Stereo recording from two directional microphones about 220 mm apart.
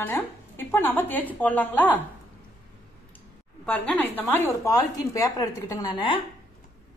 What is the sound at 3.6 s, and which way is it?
A woman's voice, 5° left (ahead or behind).